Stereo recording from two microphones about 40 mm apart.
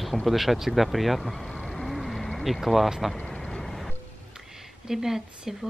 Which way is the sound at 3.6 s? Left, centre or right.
Centre.